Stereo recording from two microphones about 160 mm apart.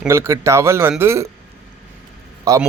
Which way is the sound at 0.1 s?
15° right (ahead or behind).